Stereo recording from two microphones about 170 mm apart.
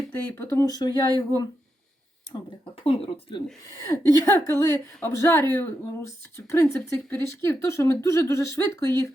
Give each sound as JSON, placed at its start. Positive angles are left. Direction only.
{"t": 0.3, "sound": "speech", "side_deg": 15}
{"t": 2.8, "sound": "speech", "side_deg": 30}
{"t": 3.8, "sound": "a woman's voice", "side_deg": 20}